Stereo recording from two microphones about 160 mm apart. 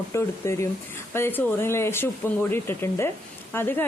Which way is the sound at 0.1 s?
15° left (ahead or behind).